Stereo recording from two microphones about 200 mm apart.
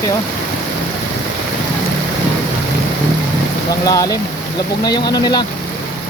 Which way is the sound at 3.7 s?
15° left (ahead or behind).